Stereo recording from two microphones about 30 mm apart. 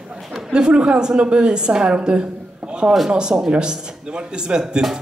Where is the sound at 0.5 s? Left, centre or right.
Right.